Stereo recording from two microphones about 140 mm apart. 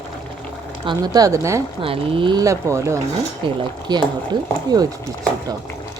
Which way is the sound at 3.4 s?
30° right (ahead or behind).